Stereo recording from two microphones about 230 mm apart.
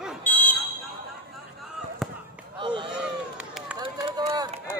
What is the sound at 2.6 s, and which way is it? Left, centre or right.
Speech, centre.